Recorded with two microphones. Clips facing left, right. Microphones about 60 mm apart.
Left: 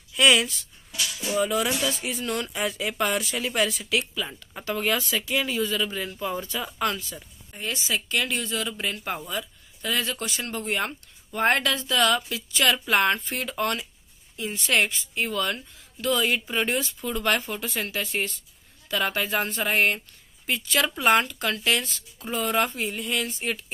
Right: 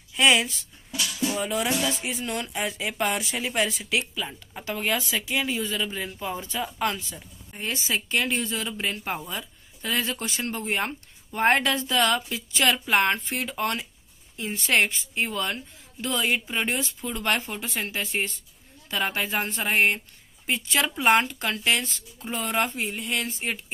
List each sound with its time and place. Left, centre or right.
0.1 s speech: right; by 6.4 s centre
6.5 s a woman's voice: centre
10.6 s a woman's voice: centre
12.7 s a woman's voice: centre
13.4 s a woman's voice: centre
17.6 s a woman's voice: right
22.2 s a woman's voice: centre